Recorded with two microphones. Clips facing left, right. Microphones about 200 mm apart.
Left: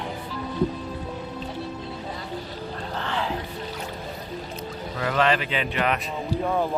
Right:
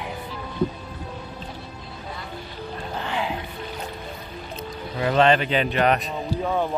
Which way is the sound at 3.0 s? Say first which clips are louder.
Right 1 dB; 15° right (ahead or behind).